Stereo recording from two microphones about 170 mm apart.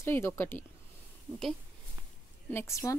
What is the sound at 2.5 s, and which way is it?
Speech, 15° left (ahead or behind).